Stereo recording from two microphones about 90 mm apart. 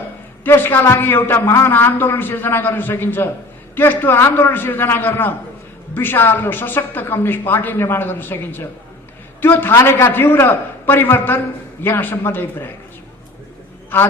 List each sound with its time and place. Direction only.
0.4 s a man's voice: 25° left (ahead or behind)